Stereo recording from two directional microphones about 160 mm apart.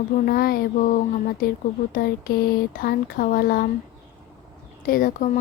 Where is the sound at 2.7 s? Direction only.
65° left (ahead or behind).